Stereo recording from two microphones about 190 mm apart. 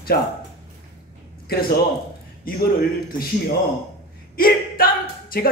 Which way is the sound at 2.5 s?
50° left (ahead or behind).